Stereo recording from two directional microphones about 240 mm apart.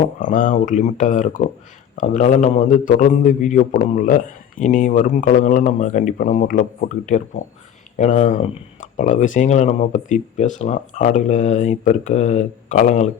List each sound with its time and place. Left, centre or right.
0.2 s a man's voice: left